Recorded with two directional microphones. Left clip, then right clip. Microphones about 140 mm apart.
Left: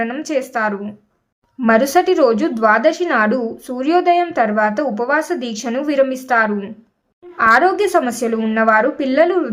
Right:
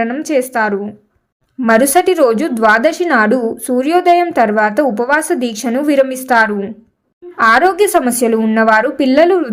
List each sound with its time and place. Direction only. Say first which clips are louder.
0.0 s a woman's voice: right 5 dB; 30° right (ahead or behind)